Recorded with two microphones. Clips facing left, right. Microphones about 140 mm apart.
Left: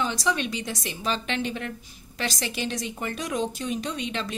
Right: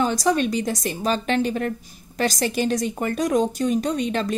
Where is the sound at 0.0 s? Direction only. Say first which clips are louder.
Right 6 dB; 45° right (ahead or behind).